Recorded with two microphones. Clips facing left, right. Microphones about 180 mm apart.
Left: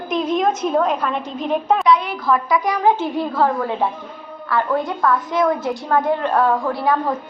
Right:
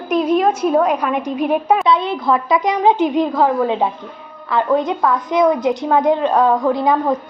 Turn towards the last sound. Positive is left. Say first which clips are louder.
# right 4 dB
turn(degrees=-20)  # may be behind; listen again after turning